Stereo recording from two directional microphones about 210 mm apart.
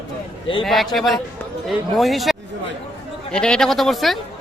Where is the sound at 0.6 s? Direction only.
Centre (ahead or behind).